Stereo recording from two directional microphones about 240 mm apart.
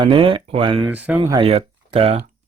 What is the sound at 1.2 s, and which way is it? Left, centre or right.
Speech, right.